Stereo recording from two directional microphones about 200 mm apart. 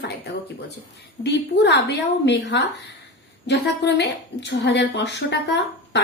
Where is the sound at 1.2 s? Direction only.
60° left (ahead or behind).